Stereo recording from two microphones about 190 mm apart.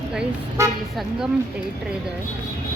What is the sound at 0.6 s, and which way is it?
Speech, 15° right (ahead or behind).